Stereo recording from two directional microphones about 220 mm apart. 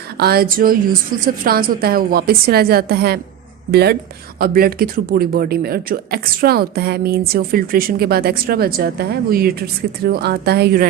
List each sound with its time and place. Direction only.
0.2 s speech: 45° right (ahead or behind)